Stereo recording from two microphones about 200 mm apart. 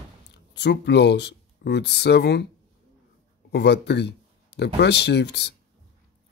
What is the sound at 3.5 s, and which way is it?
Speech, 60° left (ahead or behind).